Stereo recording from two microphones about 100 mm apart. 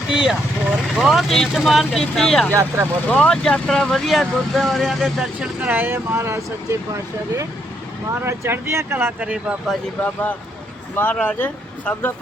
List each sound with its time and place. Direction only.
0.1 s speech: 5° right (ahead or behind)
2.5 s speech: 25° right (ahead or behind)
3.1 s speech: 10° left (ahead or behind); by 6.4 s 25° right (ahead or behind)
8.2 s speech: 25° right (ahead or behind)
9.2 s speech: 10° right (ahead or behind)
10.0 s speech: 15° left (ahead or behind)